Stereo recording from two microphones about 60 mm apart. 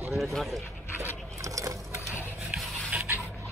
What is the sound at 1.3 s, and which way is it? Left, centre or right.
Sewing machine, right.